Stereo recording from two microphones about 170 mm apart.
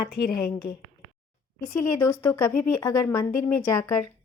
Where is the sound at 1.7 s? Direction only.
20° left (ahead or behind).